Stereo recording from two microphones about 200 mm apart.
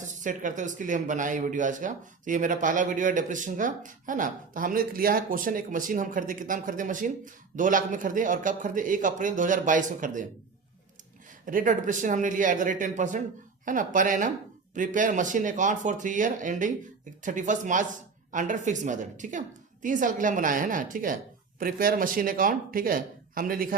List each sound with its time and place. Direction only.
0.0 s speech: 40° right (ahead or behind)
11.4 s speech: 40° right (ahead or behind)